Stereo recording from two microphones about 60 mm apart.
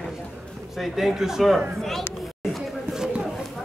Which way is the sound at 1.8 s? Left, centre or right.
Centre.